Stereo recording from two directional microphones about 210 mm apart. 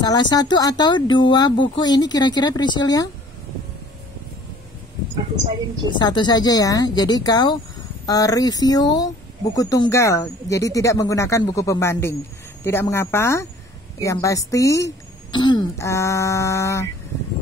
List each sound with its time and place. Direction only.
0.0 s speech: 20° left (ahead or behind)
5.9 s speech: 20° left (ahead or behind)